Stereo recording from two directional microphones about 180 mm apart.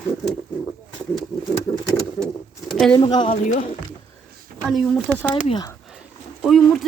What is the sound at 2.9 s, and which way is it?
Speech, 25° left (ahead or behind).